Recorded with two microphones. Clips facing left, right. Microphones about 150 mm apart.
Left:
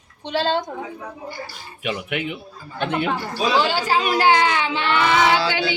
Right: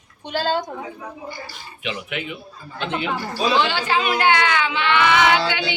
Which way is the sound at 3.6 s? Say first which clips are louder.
Left 1 dB; 40° left (ahead or behind).